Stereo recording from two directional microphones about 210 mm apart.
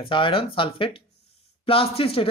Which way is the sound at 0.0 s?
25° left (ahead or behind).